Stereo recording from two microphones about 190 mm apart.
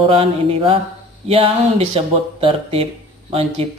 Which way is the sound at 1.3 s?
30° right (ahead or behind).